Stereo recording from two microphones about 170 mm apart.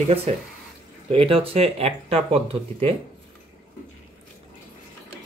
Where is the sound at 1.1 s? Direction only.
35° right (ahead or behind).